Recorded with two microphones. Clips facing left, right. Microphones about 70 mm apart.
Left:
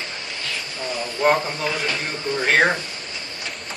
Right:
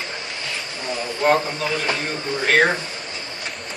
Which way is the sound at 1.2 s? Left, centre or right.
Centre.